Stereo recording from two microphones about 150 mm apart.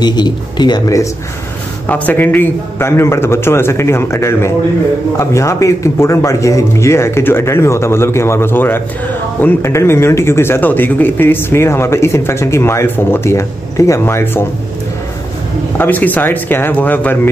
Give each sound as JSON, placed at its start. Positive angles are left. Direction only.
{"t": 0.0, "sound": "speech", "side_deg": 30}
{"t": 1.9, "sound": "a man's voice", "side_deg": 10}
{"t": 15.8, "sound": "a man's voice", "side_deg": 10}